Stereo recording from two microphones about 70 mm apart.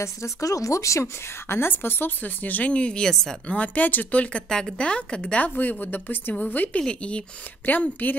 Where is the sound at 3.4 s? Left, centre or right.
Left.